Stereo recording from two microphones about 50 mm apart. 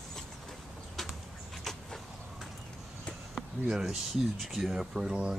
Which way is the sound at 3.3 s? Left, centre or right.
Centre.